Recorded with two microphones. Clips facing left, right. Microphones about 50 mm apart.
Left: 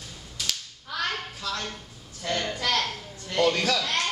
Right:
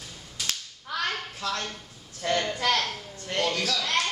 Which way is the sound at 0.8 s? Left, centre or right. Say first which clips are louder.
Even; centre.